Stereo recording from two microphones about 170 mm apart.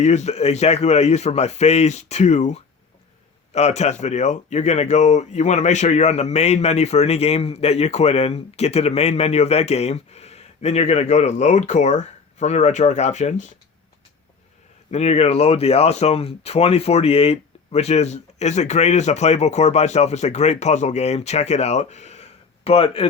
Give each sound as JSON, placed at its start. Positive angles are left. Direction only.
{"t": 0.0, "sound": "speech", "side_deg": 40}
{"t": 14.8, "sound": "speech", "side_deg": 40}